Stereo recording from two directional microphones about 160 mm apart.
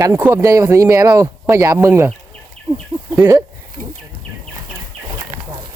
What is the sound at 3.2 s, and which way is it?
Speech, 15° right (ahead or behind).